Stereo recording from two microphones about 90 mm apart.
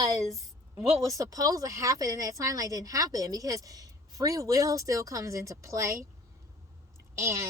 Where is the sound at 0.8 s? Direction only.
40° right (ahead or behind).